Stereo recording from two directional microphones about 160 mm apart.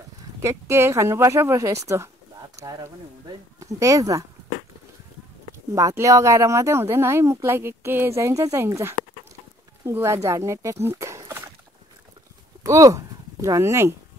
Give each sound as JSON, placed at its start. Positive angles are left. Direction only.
{"t": 0.4, "sound": "speech", "side_deg": -15}
{"t": 5.8, "sound": "speech", "side_deg": -20}
{"t": 12.6, "sound": "speech", "side_deg": -20}